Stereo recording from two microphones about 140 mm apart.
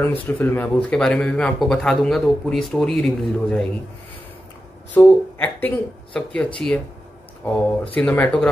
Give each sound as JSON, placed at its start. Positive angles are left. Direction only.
{"t": 0.0, "sound": "speech", "side_deg": 15}
{"t": 4.9, "sound": "speech", "side_deg": 15}